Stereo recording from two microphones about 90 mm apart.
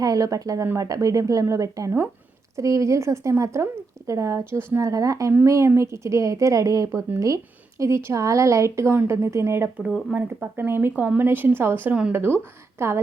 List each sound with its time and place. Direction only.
0.0 s a woman's voice: 40° right (ahead or behind)
10.1 s speech: 20° right (ahead or behind)